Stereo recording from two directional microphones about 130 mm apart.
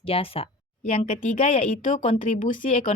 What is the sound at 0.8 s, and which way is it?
Speech, 65° left (ahead or behind).